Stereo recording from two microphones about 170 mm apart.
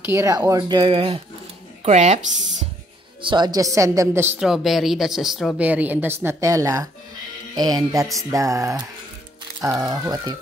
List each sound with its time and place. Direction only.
0.0 s speech: 15° right (ahead or behind); by 2.1 s 40° right (ahead or behind)
3.2 s a woman's voice: 25° right (ahead or behind)